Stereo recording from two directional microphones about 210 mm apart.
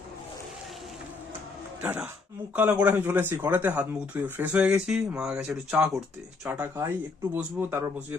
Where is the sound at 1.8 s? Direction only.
10° right (ahead or behind).